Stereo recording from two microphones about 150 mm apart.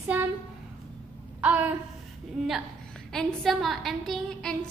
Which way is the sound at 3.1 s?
Centre (ahead or behind).